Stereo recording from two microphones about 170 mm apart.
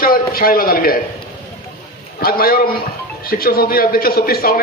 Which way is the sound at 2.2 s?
60° left (ahead or behind).